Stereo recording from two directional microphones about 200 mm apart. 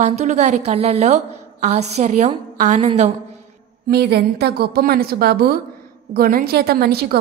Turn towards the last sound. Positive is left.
turn(degrees=-50)  # may be behind; listen again after turning